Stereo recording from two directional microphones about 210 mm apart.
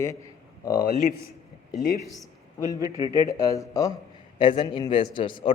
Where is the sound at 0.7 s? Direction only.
45° left (ahead or behind).